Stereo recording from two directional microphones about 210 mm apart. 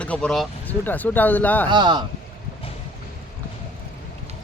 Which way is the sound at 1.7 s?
20° right (ahead or behind).